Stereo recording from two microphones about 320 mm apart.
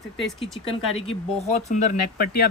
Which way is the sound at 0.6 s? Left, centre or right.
Centre.